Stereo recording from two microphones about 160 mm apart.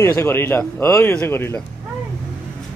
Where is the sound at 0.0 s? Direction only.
15° left (ahead or behind).